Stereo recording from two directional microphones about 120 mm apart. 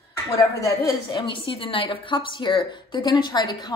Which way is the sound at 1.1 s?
45° left (ahead or behind).